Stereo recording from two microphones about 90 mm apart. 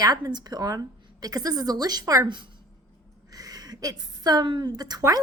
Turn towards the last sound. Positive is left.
turn(degrees=-45)  # may be behind; listen again after turning